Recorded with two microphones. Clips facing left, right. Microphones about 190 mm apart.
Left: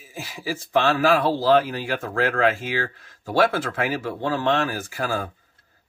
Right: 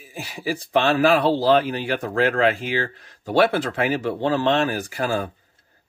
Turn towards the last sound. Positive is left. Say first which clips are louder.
# right 3 dB
turn(degrees=-15)  # may be behind; listen again after turning